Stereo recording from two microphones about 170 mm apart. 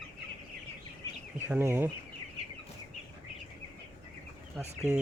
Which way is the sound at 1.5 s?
15° right (ahead or behind).